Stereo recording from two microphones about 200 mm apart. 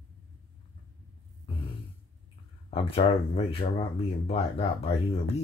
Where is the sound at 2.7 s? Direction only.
30° left (ahead or behind).